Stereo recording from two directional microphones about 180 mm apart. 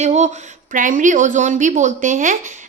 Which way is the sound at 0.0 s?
40° right (ahead or behind).